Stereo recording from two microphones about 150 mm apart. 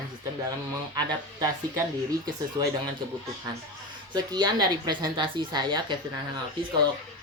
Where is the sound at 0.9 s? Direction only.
25° right (ahead or behind).